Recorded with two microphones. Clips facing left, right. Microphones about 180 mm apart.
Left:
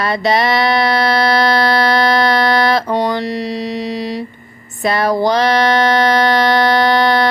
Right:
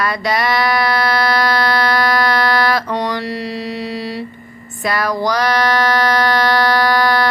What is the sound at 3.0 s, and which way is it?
Mantra, 25° left (ahead or behind).